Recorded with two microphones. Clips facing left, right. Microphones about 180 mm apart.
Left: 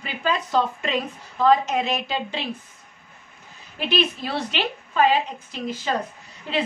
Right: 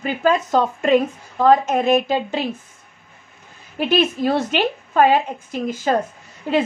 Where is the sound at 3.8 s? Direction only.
45° right (ahead or behind).